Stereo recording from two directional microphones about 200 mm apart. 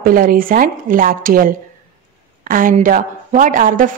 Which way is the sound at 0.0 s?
45° right (ahead or behind).